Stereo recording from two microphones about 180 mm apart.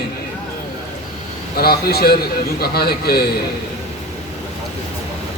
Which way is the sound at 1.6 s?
60° left (ahead or behind).